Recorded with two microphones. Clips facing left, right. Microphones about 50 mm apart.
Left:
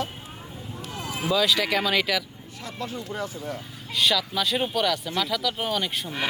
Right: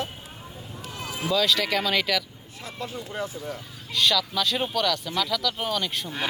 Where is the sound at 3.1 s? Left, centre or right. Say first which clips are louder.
Right 1 dB; centre.